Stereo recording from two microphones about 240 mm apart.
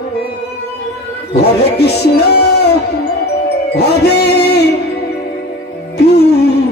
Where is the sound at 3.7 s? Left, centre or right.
Left.